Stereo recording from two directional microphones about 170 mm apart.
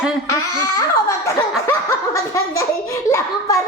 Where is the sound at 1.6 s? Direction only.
15° left (ahead or behind).